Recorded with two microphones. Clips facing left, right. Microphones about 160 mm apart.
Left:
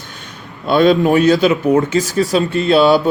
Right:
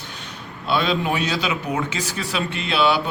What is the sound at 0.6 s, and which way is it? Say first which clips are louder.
Speech: left 10 dB; 50° left (ahead or behind).